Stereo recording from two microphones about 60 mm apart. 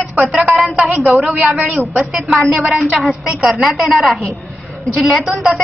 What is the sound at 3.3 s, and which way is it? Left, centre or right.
Speech, right.